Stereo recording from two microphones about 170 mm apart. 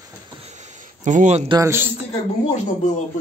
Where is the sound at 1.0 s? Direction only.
45° right (ahead or behind).